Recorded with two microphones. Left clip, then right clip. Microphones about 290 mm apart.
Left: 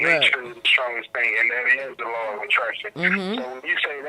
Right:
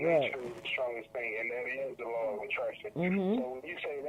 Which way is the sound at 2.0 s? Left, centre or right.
Left.